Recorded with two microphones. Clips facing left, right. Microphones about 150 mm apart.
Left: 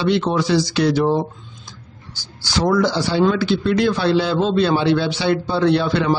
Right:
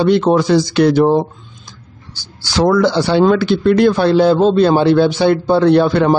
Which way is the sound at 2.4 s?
75° right (ahead or behind).